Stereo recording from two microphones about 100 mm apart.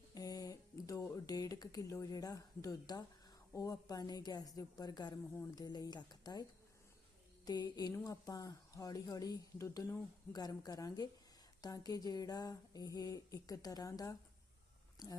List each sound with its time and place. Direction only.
0.1 s a sound: 40° left (ahead or behind)
1.1 s speech: 35° left (ahead or behind)
7.4 s speech: 45° left (ahead or behind)